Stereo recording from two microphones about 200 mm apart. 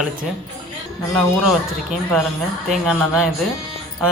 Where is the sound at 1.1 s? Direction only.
Centre (ahead or behind).